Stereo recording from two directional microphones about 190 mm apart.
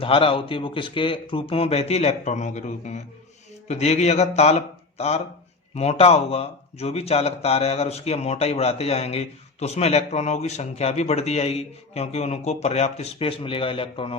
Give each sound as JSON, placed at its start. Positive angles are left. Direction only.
{"t": 0.0, "sound": "a man's voice", "side_deg": 30}